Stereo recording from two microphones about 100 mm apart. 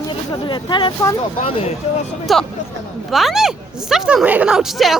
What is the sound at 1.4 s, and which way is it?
Speech, 80° left.